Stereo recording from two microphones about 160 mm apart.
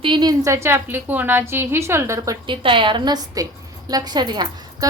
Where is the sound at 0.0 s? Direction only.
30° right (ahead or behind).